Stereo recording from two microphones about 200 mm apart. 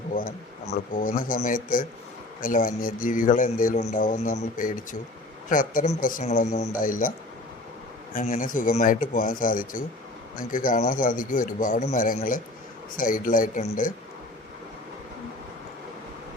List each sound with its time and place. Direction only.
0.1 s a man's voice: 45° left (ahead or behind)
8.1 s a man's voice: 40° left (ahead or behind)